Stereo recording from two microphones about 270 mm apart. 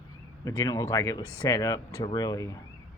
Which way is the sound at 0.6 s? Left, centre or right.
Centre.